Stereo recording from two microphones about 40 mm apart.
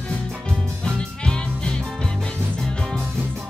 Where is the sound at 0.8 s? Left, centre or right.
Left.